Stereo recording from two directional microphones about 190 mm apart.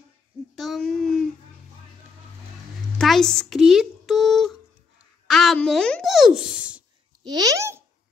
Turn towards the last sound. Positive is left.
turn(degrees=-15)  # may be behind; listen again after turning